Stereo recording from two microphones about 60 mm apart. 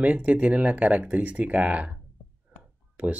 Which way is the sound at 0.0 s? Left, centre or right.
Right.